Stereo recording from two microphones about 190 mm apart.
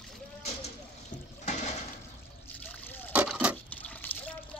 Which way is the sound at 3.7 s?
5° left (ahead or behind).